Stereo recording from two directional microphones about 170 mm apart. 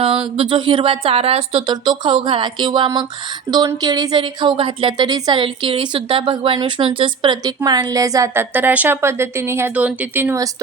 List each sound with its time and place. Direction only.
0.0 s a woman's voice: 30° right (ahead or behind)